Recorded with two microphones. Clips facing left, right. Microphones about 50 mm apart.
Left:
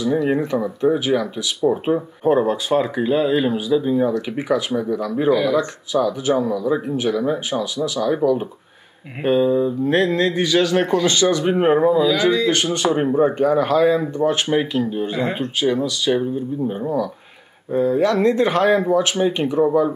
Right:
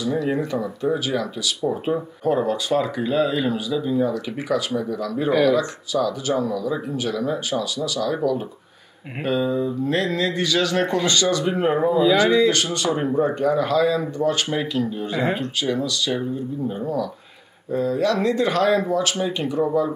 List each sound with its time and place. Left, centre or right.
0.0 s speech: left
11.9 s speech: centre
12.7 s speech: left
17.7 s speech: left